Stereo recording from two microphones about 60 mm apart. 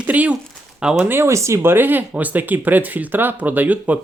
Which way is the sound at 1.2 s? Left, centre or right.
Right.